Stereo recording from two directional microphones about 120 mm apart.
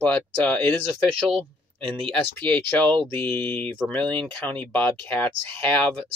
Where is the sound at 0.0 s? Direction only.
15° left (ahead or behind).